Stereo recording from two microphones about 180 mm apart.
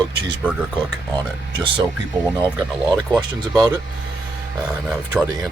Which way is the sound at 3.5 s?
20° right (ahead or behind).